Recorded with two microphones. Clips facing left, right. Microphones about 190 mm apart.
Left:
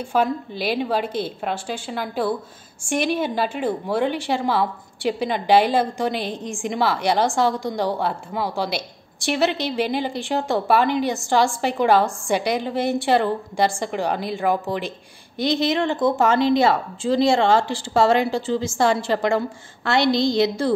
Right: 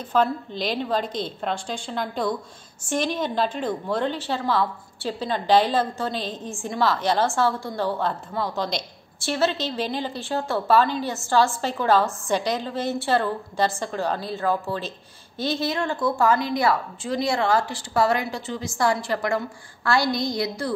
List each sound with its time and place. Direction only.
0.0 s a woman's voice: 10° left (ahead or behind); by 20.7 s 25° left (ahead or behind)